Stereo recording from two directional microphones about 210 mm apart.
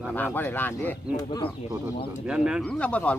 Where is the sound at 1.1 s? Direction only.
20° left (ahead or behind).